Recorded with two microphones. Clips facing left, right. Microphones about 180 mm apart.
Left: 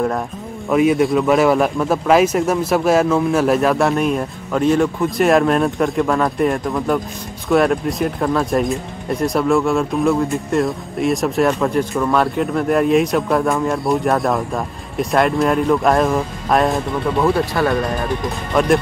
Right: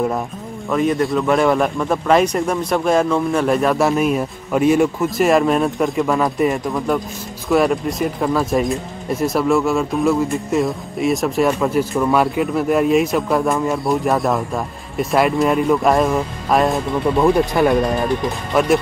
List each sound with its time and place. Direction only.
0.7 s speech: 10° left (ahead or behind)
17.2 s speech: 15° right (ahead or behind)
18.5 s speech: 5° right (ahead or behind)